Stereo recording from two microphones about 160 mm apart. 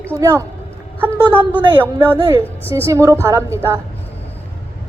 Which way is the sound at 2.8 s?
20° right (ahead or behind).